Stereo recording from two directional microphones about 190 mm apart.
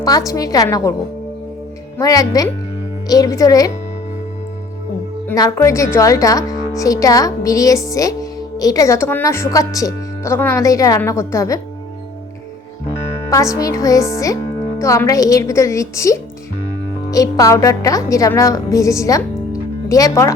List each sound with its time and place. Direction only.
0.0 s a woman's voice: 20° left (ahead or behind)
2.0 s a woman's voice: 20° left (ahead or behind)
5.3 s a woman's voice: 15° left (ahead or behind)
13.3 s a woman's voice: 15° left (ahead or behind)